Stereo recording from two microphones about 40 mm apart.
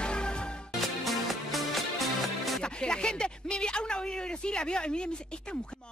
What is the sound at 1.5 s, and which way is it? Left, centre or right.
Music, centre.